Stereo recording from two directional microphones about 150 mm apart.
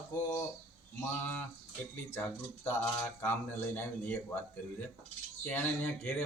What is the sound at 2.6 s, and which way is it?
Speech, 15° left (ahead or behind).